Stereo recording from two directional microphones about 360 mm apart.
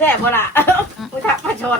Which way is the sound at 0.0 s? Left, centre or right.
Centre.